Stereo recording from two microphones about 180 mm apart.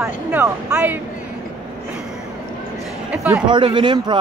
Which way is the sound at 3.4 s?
25° right (ahead or behind).